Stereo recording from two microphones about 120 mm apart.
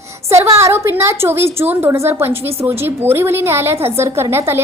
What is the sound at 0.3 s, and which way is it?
A woman's voice, 25° right (ahead or behind).